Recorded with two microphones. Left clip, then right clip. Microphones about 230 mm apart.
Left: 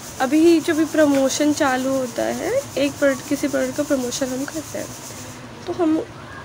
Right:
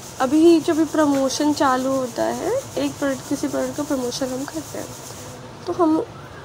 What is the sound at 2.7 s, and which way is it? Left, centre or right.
Speech, centre.